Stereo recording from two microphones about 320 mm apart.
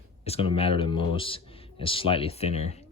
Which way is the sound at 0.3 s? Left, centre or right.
Centre.